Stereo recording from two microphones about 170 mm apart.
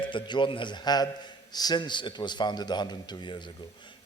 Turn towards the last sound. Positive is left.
turn(degrees=25)  # may be behind; listen again after turning